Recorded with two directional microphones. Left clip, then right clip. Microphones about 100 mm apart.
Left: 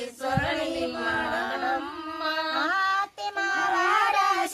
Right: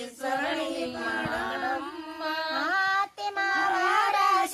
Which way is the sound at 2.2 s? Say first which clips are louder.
Left 2 dB; 45° left (ahead or behind).